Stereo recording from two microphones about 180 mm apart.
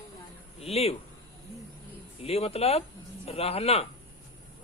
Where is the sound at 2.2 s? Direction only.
35° left (ahead or behind).